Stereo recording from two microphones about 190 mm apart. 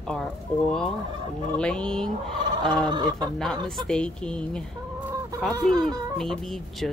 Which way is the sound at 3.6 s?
5° left (ahead or behind).